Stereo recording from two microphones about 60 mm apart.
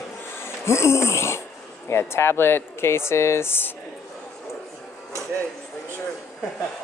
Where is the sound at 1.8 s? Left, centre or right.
Left.